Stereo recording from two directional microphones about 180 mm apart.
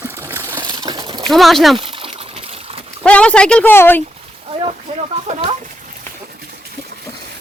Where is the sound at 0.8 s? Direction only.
25° right (ahead or behind).